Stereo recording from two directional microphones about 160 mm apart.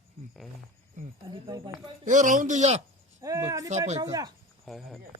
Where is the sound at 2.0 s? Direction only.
50° right (ahead or behind).